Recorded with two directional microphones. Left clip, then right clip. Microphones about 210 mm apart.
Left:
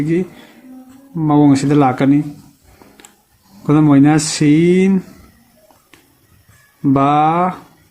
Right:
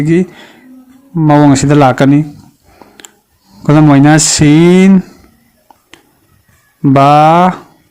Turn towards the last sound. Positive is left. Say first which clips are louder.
# right 8 dB
turn(degrees=-50)  # may be behind; listen again after turning